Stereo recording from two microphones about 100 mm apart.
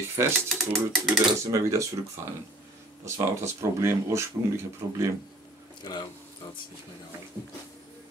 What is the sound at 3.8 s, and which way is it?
Speech, 25° right (ahead or behind).